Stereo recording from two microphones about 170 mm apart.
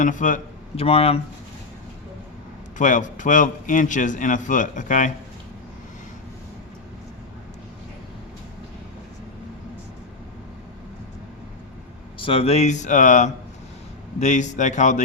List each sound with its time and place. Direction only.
0.0 s a man's voice: 50° left (ahead or behind)
0.8 s speech: 35° left (ahead or behind)
2.7 s a man's voice: 45° left (ahead or behind)
12.2 s a man's voice: 35° left (ahead or behind)